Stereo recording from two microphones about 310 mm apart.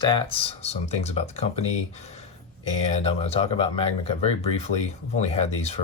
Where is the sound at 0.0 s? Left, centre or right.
Centre.